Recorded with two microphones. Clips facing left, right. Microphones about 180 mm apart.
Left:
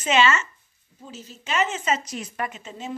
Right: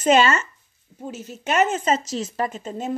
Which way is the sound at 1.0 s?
60° right (ahead or behind).